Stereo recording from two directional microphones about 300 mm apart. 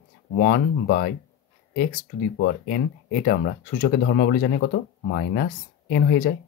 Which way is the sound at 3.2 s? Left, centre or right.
Left.